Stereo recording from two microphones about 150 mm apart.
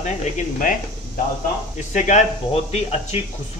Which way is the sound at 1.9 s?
55° left (ahead or behind).